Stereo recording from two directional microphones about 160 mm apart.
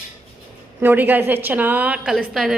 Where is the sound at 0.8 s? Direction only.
10° right (ahead or behind).